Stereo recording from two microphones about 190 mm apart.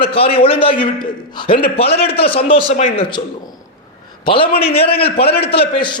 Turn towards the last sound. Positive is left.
turn(degrees=25)  # may be behind; listen again after turning